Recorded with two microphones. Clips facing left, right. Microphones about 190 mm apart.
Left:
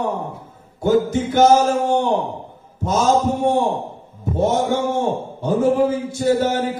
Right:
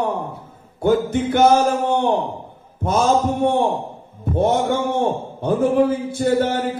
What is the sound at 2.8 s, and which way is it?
Mantra, 60° right (ahead or behind).